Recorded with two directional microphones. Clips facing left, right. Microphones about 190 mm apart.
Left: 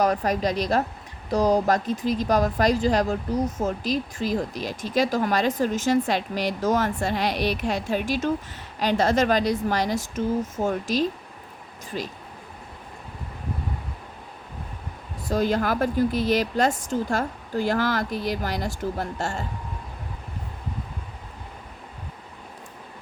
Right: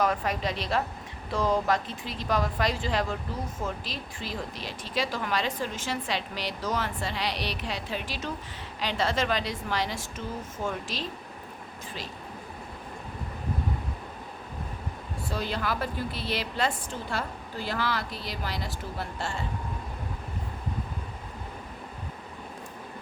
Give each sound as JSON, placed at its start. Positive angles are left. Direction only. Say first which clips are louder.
{"t": 0.0, "sound": "speech", "louder": "left 5 dB", "side_deg": 40}
{"t": 15.3, "sound": "speech", "louder": "left 9 dB", "side_deg": 45}